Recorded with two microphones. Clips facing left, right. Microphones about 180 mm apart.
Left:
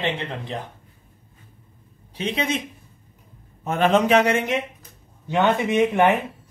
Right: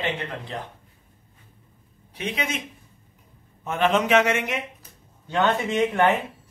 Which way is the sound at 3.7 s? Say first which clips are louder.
Left 3 dB; 35° left (ahead or behind).